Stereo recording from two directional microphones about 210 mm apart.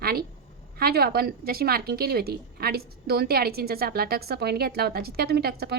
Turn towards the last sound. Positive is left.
turn(degrees=-50)  # may be behind; listen again after turning